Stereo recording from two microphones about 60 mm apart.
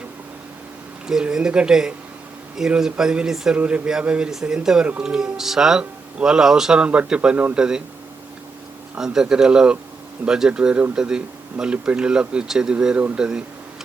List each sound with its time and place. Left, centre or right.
1.0 s speech: centre
3.5 s a man's voice: centre
9.0 s speech: centre